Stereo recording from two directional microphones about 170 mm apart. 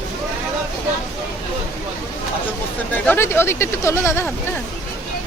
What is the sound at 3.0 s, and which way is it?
Speech, 15° left (ahead or behind).